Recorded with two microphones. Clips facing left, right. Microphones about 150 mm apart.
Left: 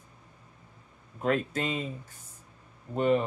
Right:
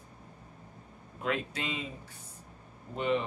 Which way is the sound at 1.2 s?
45° left (ahead or behind).